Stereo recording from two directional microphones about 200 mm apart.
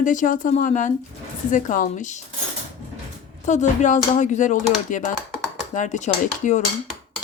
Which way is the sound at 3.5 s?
35° left (ahead or behind).